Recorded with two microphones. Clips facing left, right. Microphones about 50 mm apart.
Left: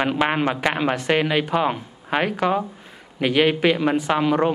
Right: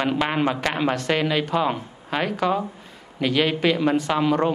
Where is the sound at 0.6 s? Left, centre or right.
Centre.